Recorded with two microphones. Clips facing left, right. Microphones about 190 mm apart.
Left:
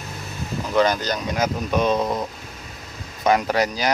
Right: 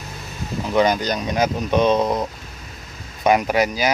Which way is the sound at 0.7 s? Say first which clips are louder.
Right 2 dB; 15° right (ahead or behind).